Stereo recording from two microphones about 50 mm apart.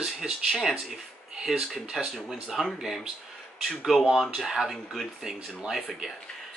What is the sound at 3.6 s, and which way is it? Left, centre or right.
Speech, centre.